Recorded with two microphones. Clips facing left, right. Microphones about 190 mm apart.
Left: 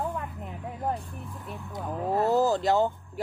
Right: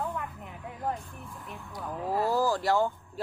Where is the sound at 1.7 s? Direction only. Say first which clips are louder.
Left 3 dB; 20° left (ahead or behind).